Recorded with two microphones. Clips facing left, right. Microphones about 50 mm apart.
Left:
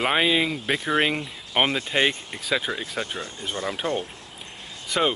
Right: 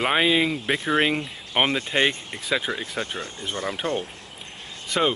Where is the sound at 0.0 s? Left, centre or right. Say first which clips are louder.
Right 1 dB; centre.